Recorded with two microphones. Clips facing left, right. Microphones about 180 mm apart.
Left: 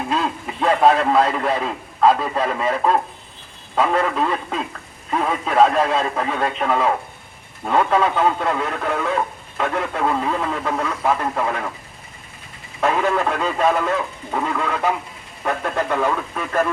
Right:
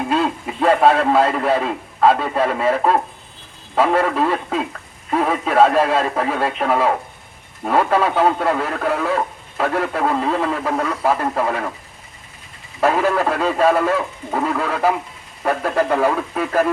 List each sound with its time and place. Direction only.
0.1 s a man's voice: centre (ahead or behind)
12.8 s speech: 5° right (ahead or behind)
15.9 s speech: 30° right (ahead or behind)